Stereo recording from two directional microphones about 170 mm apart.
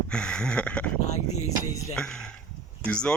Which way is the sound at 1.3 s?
40° left (ahead or behind).